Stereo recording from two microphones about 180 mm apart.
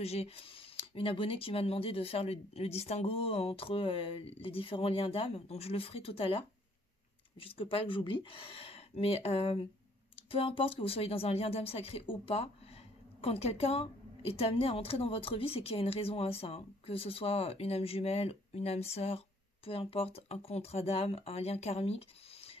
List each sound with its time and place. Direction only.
0.0 s a woman's voice: 35° left (ahead or behind)